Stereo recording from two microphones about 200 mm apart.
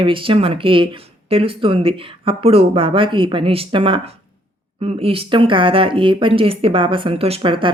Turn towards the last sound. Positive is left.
turn(degrees=-25)  # may be behind; listen again after turning